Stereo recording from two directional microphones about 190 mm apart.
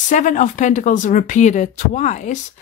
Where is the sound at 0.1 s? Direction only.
40° left (ahead or behind).